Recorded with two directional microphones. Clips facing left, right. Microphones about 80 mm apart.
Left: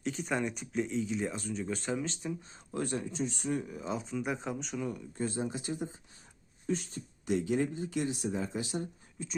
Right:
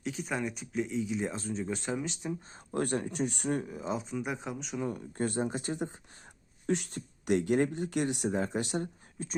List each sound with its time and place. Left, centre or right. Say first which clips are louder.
0.0 s speech: left 1 dB; centre
1.2 s speech: right 1 dB; right
2.7 s speech: right 3 dB; right
3.7 s speech: right 2 dB; right
4.2 s speech: left 1 dB; centre
4.8 s speech: right 5 dB; right
5.1 s speech: right 4 dB; right
6.7 s speech: right 3 dB; right